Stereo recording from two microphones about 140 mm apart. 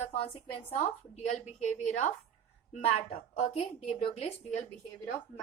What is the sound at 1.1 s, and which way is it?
A woman's voice, 55° left (ahead or behind).